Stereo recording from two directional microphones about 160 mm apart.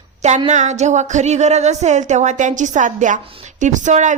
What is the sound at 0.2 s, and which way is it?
Speech, 45° right (ahead or behind).